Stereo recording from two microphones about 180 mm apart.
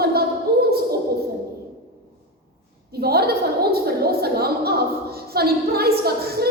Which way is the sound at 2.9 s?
60° right (ahead or behind).